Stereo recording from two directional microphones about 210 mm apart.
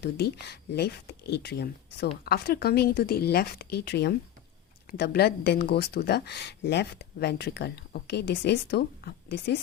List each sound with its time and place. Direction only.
0.0 s speech: 50° left (ahead or behind)